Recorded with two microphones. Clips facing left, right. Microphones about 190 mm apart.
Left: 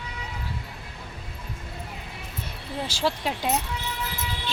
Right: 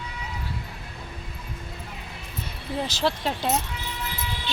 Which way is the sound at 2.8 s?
10° left (ahead or behind).